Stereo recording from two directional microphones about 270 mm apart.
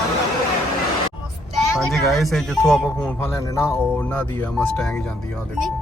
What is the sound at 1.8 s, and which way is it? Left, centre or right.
Speech, centre.